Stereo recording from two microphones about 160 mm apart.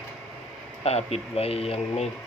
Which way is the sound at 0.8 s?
40° left (ahead or behind).